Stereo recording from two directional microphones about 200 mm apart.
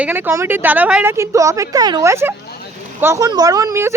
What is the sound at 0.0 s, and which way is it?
Speech, 10° right (ahead or behind).